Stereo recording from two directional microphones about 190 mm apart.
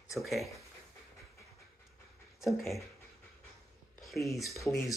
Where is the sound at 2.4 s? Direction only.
Centre (ahead or behind).